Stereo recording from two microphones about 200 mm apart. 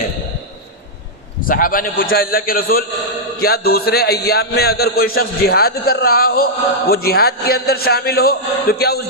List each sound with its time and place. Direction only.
1.5 s a man's voice: 45° left (ahead or behind)